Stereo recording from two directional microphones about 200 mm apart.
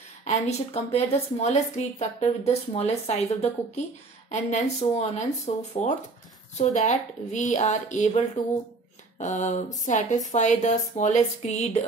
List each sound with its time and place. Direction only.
0.2 s a woman's voice: 35° left (ahead or behind)
9.2 s a woman's voice: 35° left (ahead or behind)